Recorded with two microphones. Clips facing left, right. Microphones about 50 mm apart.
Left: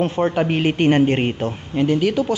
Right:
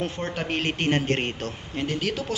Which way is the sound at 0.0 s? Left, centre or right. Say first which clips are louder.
Left 10 dB; left.